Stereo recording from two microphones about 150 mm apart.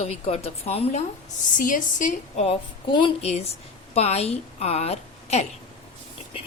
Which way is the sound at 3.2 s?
45° left (ahead or behind).